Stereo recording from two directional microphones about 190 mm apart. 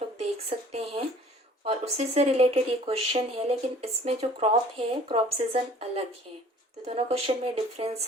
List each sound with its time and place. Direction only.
0.7 s speech: 35° right (ahead or behind)